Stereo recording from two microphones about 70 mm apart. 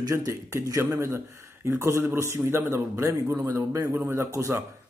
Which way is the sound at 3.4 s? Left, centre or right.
Right.